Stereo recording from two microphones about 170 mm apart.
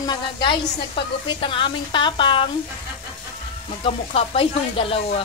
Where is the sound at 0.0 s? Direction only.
25° left (ahead or behind).